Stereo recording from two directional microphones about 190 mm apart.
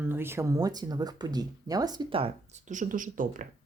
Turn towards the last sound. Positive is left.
turn(degrees=-45)  # may be behind; listen again after turning